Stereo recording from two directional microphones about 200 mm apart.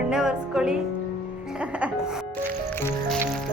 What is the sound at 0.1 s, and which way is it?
Music, 5° right (ahead or behind).